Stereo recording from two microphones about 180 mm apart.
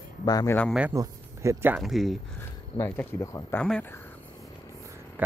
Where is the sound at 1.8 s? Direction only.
Centre (ahead or behind).